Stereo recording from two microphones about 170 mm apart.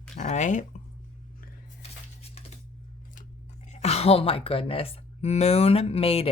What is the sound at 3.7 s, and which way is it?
Speech, 40° left (ahead or behind).